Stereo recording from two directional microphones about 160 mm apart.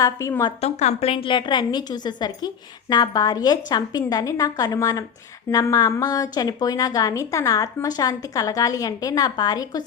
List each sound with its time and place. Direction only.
0.0 s a woman's voice: 20° left (ahead or behind)
0.6 s a woman's voice: 45° left (ahead or behind); by 9.8 s 25° left (ahead or behind)